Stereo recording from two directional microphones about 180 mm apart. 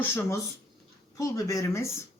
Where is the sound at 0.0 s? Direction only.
15° left (ahead or behind).